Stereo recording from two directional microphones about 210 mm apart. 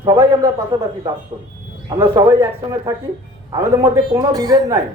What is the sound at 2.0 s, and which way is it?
Speech, 20° right (ahead or behind).